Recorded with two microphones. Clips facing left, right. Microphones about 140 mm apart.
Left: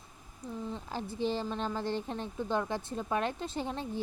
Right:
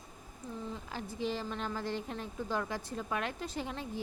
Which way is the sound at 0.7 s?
30° left (ahead or behind).